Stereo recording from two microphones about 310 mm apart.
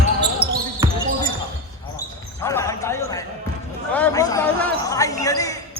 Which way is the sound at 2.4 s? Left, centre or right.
Centre.